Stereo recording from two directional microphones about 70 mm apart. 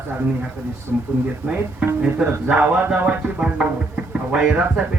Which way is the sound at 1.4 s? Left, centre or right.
Right.